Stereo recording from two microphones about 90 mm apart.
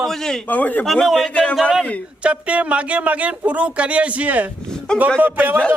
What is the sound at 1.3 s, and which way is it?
Speech, 15° left (ahead or behind).